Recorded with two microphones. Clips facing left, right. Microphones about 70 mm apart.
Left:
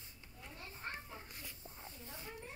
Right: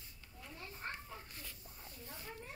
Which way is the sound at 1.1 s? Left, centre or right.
Centre.